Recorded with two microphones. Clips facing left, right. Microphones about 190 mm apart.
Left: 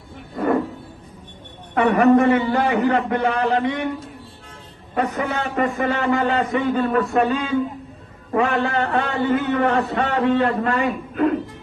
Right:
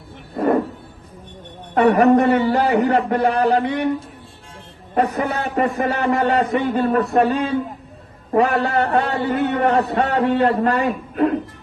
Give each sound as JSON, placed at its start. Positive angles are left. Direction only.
{"t": 0.3, "sound": "a sound", "side_deg": -35}
{"t": 1.7, "sound": "a man's voice", "side_deg": -35}
{"t": 4.9, "sound": "a man's voice", "side_deg": -35}